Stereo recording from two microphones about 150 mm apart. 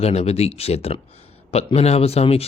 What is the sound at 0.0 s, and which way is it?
A man's voice, 45° left (ahead or behind).